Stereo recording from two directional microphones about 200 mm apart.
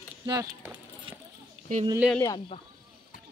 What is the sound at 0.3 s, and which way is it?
Speech, 15° right (ahead or behind).